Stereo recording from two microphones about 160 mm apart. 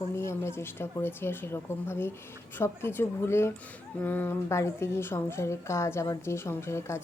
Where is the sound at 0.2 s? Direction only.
15° left (ahead or behind).